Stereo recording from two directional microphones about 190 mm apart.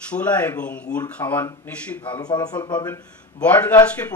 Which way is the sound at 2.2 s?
20° left (ahead or behind).